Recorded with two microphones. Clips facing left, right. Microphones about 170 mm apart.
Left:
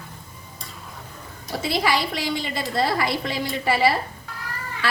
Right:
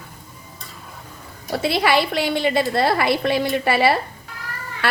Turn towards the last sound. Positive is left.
turn(degrees=-65)  # may be behind; listen again after turning